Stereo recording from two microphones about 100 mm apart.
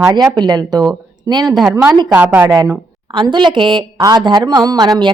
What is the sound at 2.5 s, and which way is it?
Speech, 40° right (ahead or behind).